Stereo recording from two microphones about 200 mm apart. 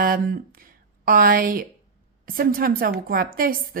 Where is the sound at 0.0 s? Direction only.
45° right (ahead or behind).